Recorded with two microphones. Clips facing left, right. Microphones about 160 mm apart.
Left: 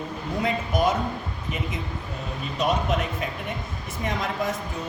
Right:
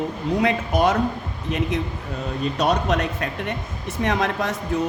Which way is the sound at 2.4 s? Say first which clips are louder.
Right 4 dB; 80° right.